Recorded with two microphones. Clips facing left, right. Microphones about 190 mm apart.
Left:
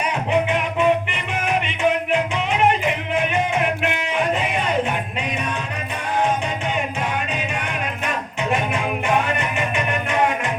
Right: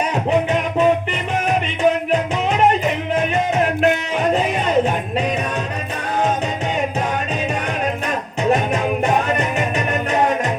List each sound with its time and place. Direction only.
1.5 s music: 40° right (ahead or behind)
8.0 s music: 40° right (ahead or behind)